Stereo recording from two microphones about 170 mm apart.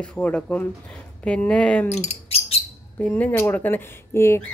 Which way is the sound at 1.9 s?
40° left (ahead or behind).